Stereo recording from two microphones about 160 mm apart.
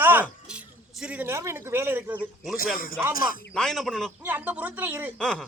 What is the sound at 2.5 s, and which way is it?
Speech, 65° left (ahead or behind).